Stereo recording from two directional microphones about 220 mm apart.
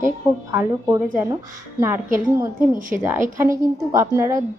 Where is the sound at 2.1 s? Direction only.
10° right (ahead or behind).